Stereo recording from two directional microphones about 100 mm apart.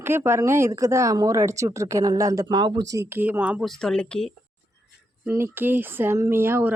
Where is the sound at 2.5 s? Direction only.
50° right (ahead or behind).